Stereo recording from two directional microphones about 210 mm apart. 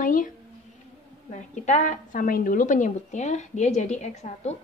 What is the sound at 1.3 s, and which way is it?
A woman's voice, 35° left (ahead or behind).